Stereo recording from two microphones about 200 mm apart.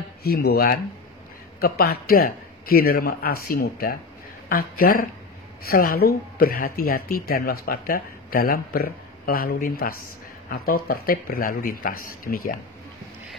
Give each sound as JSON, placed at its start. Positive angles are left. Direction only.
{"t": 0.2, "sound": "speech", "side_deg": 50}